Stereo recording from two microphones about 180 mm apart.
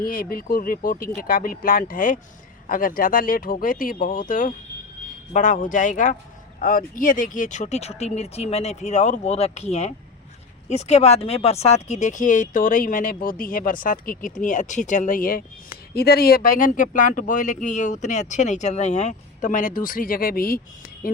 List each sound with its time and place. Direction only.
0.0 s speech: 55° left (ahead or behind)